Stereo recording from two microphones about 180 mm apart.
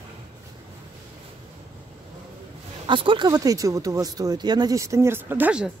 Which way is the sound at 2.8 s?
25° right (ahead or behind).